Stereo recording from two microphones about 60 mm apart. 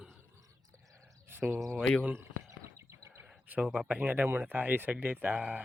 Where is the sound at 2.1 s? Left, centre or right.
Right.